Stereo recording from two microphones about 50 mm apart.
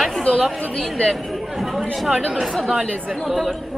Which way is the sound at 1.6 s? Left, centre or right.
Centre.